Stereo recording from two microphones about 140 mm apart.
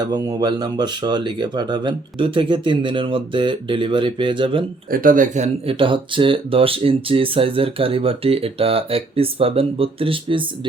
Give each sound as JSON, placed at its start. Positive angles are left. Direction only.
{"t": 0.0, "sound": "speech", "side_deg": -30}
{"t": 4.9, "sound": "speech", "side_deg": -80}
{"t": 5.6, "sound": "speech", "side_deg": -40}